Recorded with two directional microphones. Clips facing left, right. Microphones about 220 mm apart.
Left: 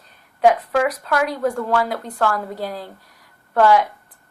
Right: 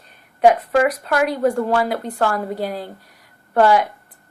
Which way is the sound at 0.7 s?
10° right (ahead or behind).